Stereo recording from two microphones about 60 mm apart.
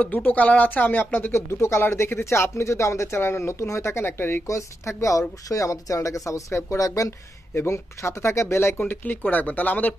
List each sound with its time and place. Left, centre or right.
0.0 s speech: left
1.3 s speech: left
4.5 s speech: left
9.0 s speech: left